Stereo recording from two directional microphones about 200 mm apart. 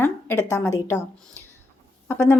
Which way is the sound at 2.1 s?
15° left (ahead or behind).